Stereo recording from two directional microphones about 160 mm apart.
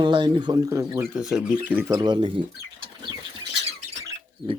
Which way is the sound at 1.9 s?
30° right (ahead or behind).